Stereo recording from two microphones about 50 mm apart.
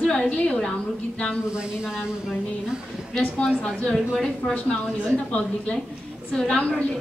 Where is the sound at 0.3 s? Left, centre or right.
Centre.